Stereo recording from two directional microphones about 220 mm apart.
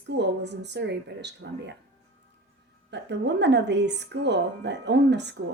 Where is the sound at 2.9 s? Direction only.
50° right (ahead or behind).